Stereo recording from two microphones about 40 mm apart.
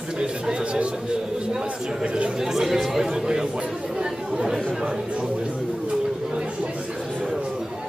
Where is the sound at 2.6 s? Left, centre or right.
Centre.